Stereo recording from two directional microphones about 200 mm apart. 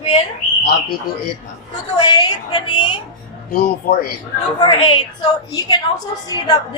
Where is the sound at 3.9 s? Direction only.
50° left (ahead or behind).